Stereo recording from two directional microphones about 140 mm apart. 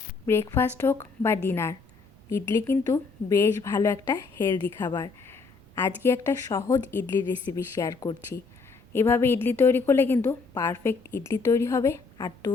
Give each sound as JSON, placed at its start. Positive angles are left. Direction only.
{"t": 0.3, "sound": "a woman's voice", "side_deg": 15}